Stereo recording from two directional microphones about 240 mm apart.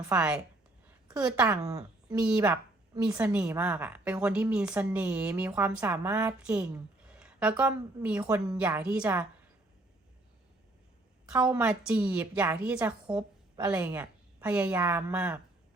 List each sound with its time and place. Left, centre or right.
0.0 s a woman's voice: centre
11.3 s a woman's voice: centre